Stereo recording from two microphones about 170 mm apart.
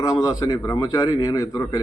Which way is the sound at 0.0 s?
20° left (ahead or behind).